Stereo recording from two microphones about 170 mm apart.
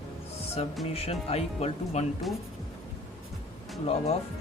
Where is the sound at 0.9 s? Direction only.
35° left (ahead or behind).